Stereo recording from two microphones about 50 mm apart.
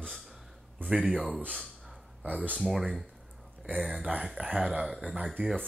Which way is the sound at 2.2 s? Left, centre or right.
Right.